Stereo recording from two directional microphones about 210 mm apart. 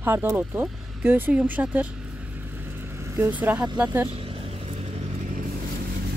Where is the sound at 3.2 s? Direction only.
10° right (ahead or behind).